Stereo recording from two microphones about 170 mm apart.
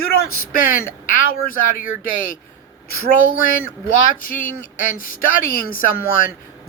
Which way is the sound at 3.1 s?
55° left (ahead or behind).